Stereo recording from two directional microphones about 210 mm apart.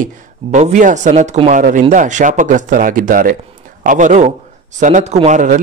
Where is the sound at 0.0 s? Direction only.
35° right (ahead or behind).